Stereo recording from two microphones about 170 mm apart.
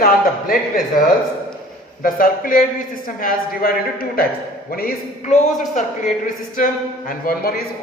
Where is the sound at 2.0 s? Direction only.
55° left (ahead or behind).